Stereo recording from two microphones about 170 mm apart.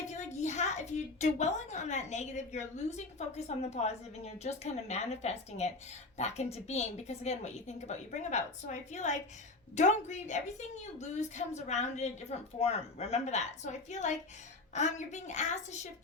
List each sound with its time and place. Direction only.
0.1 s a woman's voice: 45° left (ahead or behind)